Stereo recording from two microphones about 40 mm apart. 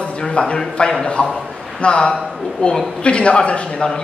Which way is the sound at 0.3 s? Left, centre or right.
Left.